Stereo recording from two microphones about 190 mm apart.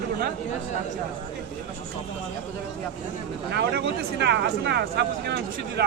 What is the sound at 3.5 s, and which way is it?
Speech, 60° right (ahead or behind).